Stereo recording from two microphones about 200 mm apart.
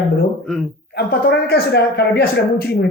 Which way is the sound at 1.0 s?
50° left (ahead or behind).